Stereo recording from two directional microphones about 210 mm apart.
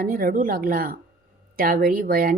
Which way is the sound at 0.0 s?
45° right (ahead or behind).